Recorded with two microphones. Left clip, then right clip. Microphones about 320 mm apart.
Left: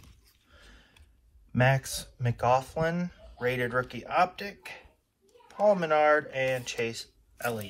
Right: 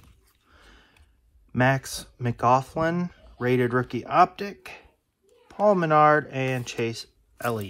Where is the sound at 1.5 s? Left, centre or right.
Right.